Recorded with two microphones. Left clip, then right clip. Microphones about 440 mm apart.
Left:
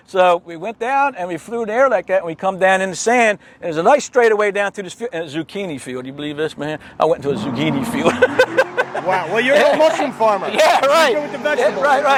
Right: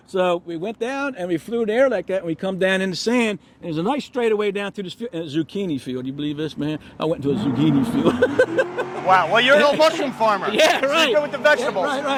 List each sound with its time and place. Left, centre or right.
0.1 s speech: left
9.0 s speech: right
10.2 s speech: centre
10.5 s speech: left